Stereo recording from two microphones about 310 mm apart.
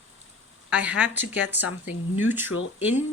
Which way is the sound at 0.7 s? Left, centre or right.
Centre.